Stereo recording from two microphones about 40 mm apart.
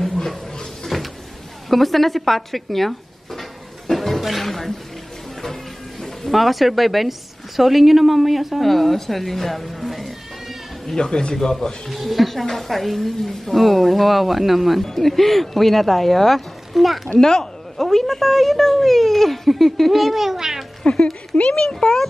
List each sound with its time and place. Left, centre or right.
0.0 s a sound: centre
0.8 s cupboard open or close: centre
1.7 s a sound: centre
4.2 s a woman's voice: centre
11.0 s a child's voice: centre
11.9 s a woman's voice: centre
17.2 s a sound: centre
17.8 s a woman's voice: centre
20.8 s a child's voice: centre